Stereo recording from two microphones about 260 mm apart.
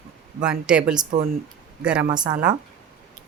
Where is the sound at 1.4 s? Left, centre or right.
Centre.